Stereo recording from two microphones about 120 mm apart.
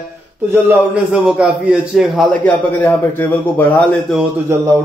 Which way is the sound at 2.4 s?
20° left (ahead or behind).